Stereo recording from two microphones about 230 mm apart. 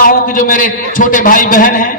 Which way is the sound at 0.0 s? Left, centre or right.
Left.